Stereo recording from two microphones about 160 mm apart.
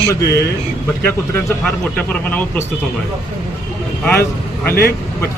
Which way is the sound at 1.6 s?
5° left (ahead or behind).